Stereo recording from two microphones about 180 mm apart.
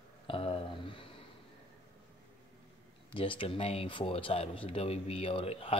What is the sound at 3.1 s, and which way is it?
Speech, 30° left (ahead or behind).